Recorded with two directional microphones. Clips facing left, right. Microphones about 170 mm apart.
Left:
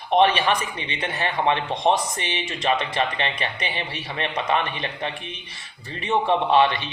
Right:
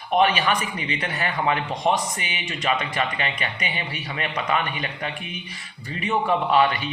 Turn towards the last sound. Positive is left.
turn(degrees=25)  # may be behind; listen again after turning